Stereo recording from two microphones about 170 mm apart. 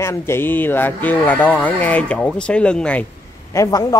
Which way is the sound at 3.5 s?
20° left (ahead or behind).